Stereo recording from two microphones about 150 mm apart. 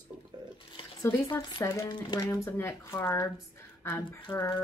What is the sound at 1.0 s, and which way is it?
Speech, 15° left (ahead or behind).